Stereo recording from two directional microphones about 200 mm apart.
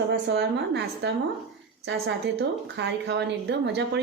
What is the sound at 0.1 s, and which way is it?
A woman's voice, 55° right (ahead or behind).